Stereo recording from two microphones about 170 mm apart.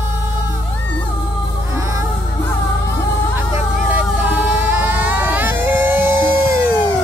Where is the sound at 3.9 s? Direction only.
10° right (ahead or behind).